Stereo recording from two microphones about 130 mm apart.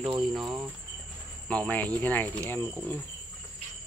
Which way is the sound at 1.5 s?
10° left (ahead or behind).